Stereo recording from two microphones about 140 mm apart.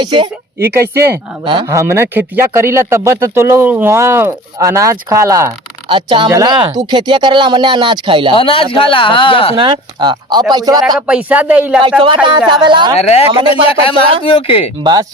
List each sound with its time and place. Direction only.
0.0 s speech: 35° right (ahead or behind)
0.7 s speech: 20° right (ahead or behind)
5.9 s speech: 35° right (ahead or behind)
8.3 s speech: 40° left (ahead or behind)
9.6 s speech: 35° right (ahead or behind)
10.9 s a man's voice: 10° right (ahead or behind)
12.0 s speech: 35° right (ahead or behind)
13.0 s speech: 50° left (ahead or behind)